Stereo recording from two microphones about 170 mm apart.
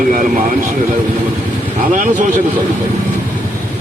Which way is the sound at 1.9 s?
50° right (ahead or behind).